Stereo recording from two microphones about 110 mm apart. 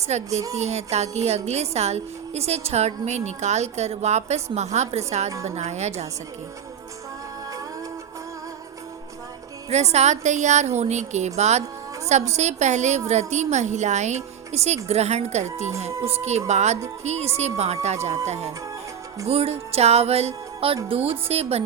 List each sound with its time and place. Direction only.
0.1 s a woman's voice: 85° right
9.6 s a woman's voice: 80° right
16.5 s a woman's voice: 90° right
17.0 s a woman's voice: 75° right (ahead or behind)
19.3 s music: 70° right (ahead or behind)
20.8 s speech: 60° right (ahead or behind)